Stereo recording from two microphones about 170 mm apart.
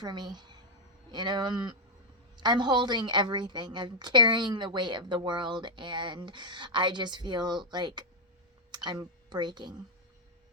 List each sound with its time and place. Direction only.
0.0 s a woman's voice: 25° right (ahead or behind)